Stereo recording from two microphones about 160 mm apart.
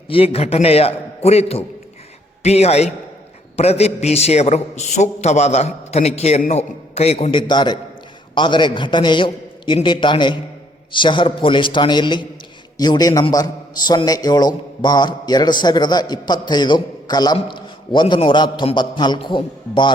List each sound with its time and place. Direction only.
0.1 s a man's voice: 35° left (ahead or behind)